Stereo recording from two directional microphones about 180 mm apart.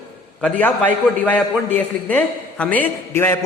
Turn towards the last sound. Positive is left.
turn(degrees=15)  # may be behind; listen again after turning